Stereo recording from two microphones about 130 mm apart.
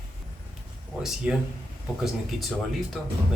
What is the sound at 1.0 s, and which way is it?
Speech, 5° right (ahead or behind).